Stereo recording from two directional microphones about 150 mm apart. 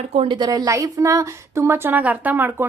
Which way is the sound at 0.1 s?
40° right (ahead or behind).